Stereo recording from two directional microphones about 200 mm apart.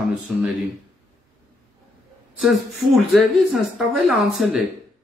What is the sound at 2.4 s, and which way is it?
A woman's voice, centre (ahead or behind).